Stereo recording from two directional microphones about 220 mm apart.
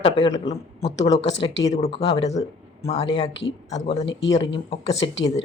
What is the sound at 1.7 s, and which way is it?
Speech, 30° left (ahead or behind).